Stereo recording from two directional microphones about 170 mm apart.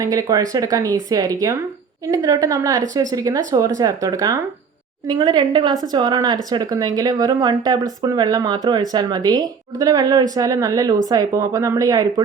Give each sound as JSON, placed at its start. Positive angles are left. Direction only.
{"t": 0.0, "sound": "speech", "side_deg": -20}